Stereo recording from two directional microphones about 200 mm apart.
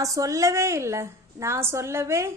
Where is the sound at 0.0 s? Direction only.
15° right (ahead or behind).